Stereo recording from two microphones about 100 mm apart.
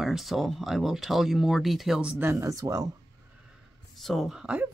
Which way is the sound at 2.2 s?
30° right (ahead or behind).